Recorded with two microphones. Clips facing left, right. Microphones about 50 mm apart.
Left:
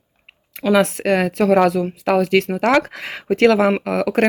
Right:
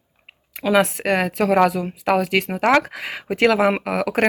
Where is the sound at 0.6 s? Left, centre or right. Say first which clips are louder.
Left 2 dB; centre.